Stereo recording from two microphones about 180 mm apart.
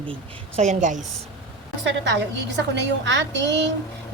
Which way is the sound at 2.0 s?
75° right (ahead or behind).